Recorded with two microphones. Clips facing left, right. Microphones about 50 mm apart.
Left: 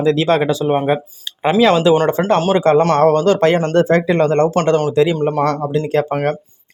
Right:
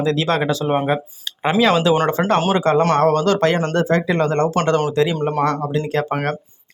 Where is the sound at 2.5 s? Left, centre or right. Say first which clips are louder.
Left 4 dB; left.